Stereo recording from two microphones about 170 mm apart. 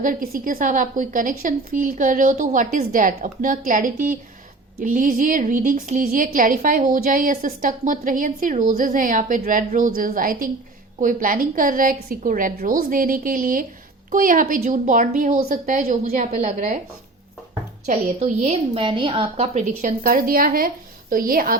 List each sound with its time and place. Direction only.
0.0 s a woman's voice: 55° right (ahead or behind)
17.8 s a woman's voice: 45° right (ahead or behind)